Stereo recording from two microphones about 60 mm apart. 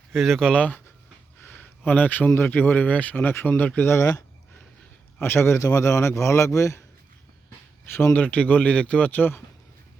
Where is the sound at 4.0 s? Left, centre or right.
Left.